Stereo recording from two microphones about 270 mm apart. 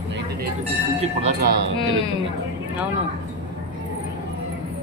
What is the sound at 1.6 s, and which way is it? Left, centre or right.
Speech, right.